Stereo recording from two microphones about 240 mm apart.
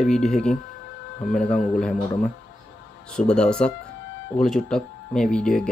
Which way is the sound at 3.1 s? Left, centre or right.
Centre.